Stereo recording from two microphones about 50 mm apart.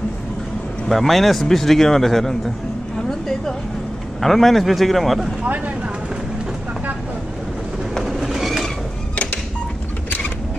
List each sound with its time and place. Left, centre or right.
0.8 s speech: centre
3.0 s a sound: centre
4.2 s speech: centre
8.0 s train: centre
9.1 s music: left